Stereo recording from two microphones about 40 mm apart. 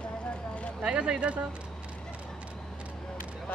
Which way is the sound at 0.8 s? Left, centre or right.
Right.